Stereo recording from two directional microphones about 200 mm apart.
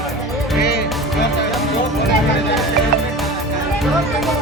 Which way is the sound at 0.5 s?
50° left (ahead or behind).